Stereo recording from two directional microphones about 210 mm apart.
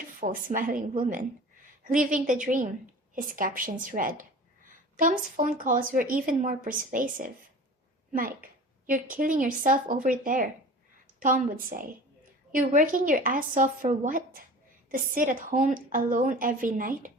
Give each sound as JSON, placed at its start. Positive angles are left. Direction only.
{"t": 0.2, "sound": "a woman's voice", "side_deg": -40}
{"t": 8.9, "sound": "a woman's voice", "side_deg": -40}